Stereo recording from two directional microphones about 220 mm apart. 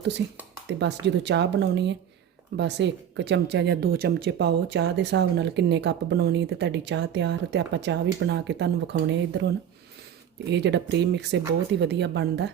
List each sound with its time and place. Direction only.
0.7 s speech: 50° right (ahead or behind)
10.5 s speech: 50° right (ahead or behind)